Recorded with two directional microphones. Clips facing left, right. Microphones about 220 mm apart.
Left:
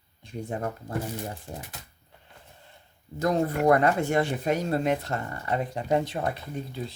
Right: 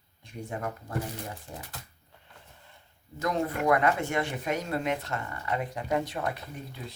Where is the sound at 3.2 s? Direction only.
35° left (ahead or behind).